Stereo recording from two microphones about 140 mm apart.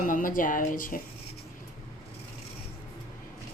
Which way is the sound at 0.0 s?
75° left (ahead or behind).